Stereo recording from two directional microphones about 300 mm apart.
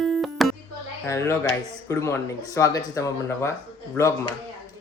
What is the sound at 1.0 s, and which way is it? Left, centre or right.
Speech, centre.